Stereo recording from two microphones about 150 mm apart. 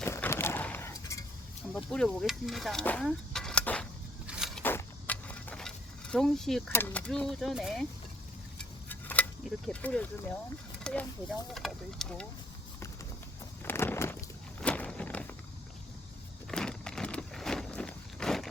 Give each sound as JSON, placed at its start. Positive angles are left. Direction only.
{"t": 0.0, "sound": "a sound", "side_deg": 15}
{"t": 1.7, "sound": "speech", "side_deg": 5}
{"t": 2.8, "sound": "a sound", "side_deg": 5}
{"t": 4.3, "sound": "vehicle", "side_deg": 0}
{"t": 4.6, "sound": "a sound", "side_deg": 10}
{"t": 6.7, "sound": "speech", "side_deg": 15}
{"t": 7.1, "sound": "speech", "side_deg": 0}
{"t": 8.5, "sound": "keys jangling", "side_deg": 10}
{"t": 9.8, "sound": "speech", "side_deg": 10}
{"t": 13.7, "sound": "a sound", "side_deg": 15}
{"t": 14.6, "sound": "walk", "side_deg": 10}
{"t": 16.5, "sound": "walk", "side_deg": 5}